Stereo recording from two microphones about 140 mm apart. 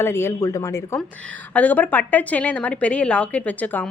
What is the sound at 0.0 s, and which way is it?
Speech, 20° left (ahead or behind).